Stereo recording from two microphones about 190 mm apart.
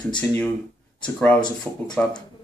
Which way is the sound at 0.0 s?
20° left (ahead or behind).